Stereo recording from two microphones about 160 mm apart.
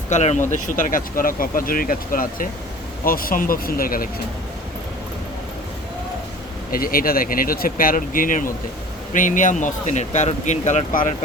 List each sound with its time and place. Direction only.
0.1 s speech: 45° left (ahead or behind); by 4.1 s 65° left (ahead or behind)
6.7 s speech: 65° left (ahead or behind)